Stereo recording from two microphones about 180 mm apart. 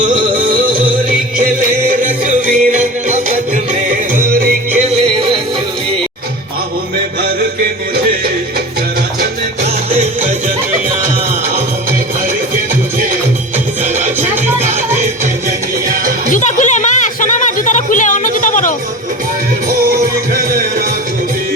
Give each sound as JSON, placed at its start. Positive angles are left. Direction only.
{"t": 0.3, "sound": "music", "side_deg": -25}
{"t": 1.9, "sound": "music", "side_deg": -45}
{"t": 4.8, "sound": "music", "side_deg": -30}
{"t": 13.9, "sound": "music", "side_deg": -45}
{"t": 15.9, "sound": "music", "side_deg": -50}
{"t": 16.3, "sound": "a sound", "side_deg": 45}
{"t": 20.3, "sound": "music", "side_deg": -55}